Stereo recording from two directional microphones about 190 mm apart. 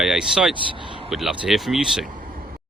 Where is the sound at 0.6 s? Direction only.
25° right (ahead or behind).